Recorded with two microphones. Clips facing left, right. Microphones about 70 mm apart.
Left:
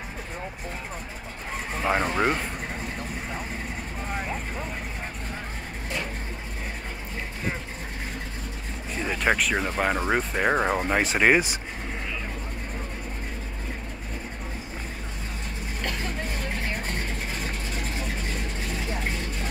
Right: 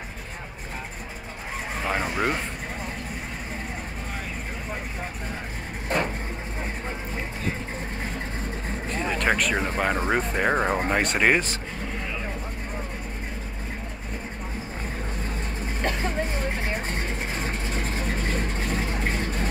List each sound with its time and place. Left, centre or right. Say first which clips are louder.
1.8 s speech: left 3 dB; centre
8.9 s vehicle: even; centre
9.8 s speech: even; centre
15.8 s vehicle: right 5 dB; right